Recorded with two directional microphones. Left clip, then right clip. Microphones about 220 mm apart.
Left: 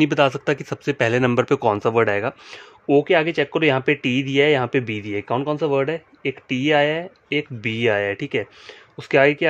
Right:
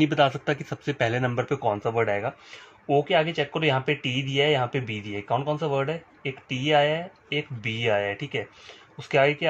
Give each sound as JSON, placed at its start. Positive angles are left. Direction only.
{"t": 0.0, "sound": "speech", "side_deg": 30}